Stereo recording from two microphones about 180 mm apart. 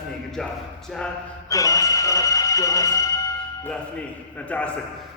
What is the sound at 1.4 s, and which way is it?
Speech, 20° left (ahead or behind).